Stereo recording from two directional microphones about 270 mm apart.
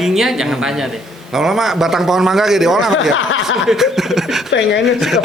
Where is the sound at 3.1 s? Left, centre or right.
Left.